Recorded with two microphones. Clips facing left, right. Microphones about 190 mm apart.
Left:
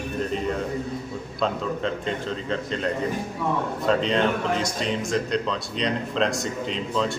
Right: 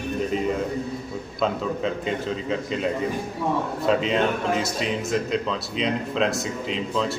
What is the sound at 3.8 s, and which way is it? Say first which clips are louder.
Speech: even; 5° right (ahead or behind).